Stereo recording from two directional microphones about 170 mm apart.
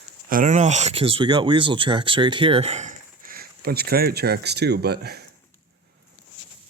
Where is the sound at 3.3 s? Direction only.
65° right (ahead or behind).